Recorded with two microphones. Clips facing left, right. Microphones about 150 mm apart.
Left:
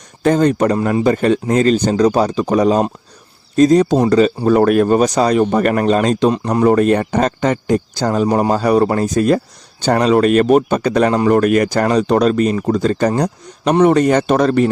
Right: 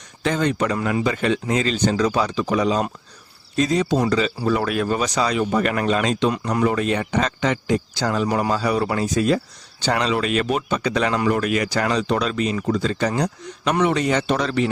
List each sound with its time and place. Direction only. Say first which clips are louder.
0.2 s speech: left 8 dB; 45° left (ahead or behind)